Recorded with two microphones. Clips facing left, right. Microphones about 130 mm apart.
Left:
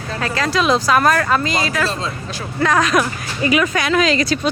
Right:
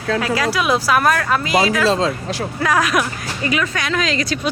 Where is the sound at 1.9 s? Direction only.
90° right.